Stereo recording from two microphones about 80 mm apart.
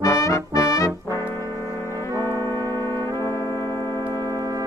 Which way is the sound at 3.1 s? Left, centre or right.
Left.